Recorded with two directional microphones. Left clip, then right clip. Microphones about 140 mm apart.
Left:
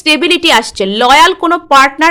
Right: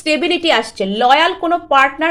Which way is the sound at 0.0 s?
40° left (ahead or behind).